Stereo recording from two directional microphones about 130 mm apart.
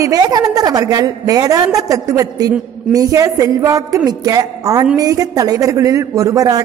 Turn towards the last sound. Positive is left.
turn(degrees=-25)  # may be behind; listen again after turning